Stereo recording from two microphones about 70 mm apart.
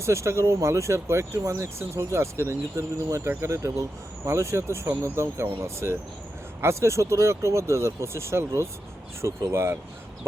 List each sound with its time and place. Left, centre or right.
0.0 s speech: right